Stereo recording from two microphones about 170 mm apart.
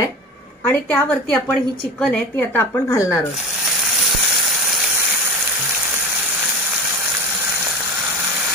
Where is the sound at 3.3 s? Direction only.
Centre (ahead or behind).